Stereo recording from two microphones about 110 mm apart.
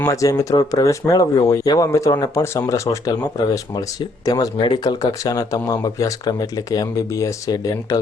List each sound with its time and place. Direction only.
0.0 s speech: 30° left (ahead or behind)
4.3 s speech: 40° left (ahead or behind)